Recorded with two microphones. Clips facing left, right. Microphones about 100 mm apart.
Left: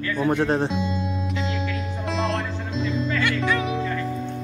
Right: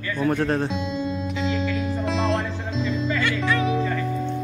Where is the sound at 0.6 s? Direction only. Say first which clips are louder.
Even; centre (ahead or behind).